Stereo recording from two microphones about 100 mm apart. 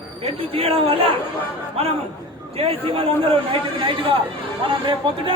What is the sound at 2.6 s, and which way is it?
Speech, 70° right (ahead or behind).